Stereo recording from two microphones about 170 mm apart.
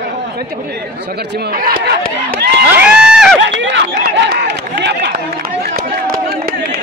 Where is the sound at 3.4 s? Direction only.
90° right.